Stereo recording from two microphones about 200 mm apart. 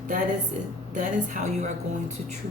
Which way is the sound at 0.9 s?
40° right (ahead or behind).